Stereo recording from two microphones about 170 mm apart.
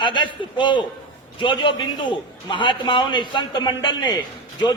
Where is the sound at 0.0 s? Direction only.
30° left (ahead or behind).